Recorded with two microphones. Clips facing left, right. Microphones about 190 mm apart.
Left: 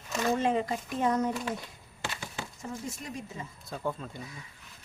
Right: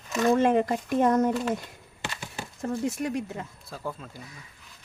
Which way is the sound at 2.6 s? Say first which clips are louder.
Right 13 dB; 70° right (ahead or behind).